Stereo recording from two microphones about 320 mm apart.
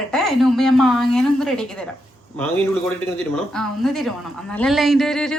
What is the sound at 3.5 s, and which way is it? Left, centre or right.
A woman's voice, centre.